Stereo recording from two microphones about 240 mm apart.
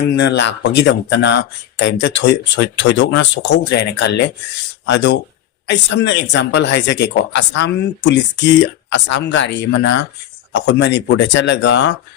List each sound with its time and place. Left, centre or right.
0.2 s speech: left